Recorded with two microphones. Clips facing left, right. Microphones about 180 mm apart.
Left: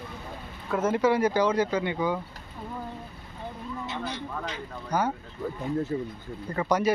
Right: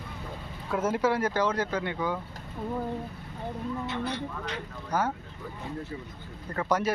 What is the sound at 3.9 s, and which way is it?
Speech, 60° right (ahead or behind).